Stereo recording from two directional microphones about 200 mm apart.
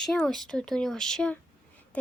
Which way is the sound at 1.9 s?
5° left (ahead or behind).